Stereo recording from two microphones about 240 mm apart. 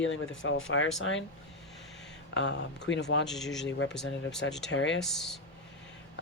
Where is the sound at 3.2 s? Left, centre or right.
Centre.